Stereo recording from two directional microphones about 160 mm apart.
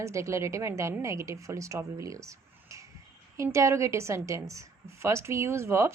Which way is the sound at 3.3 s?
20° right (ahead or behind).